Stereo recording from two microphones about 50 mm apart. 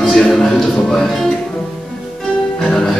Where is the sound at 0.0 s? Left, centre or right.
Centre.